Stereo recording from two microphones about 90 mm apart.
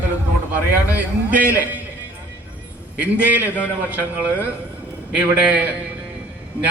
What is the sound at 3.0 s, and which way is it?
A man's voice, 15° right (ahead or behind).